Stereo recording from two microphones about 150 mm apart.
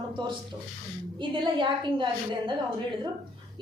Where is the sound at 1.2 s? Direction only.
35° right (ahead or behind).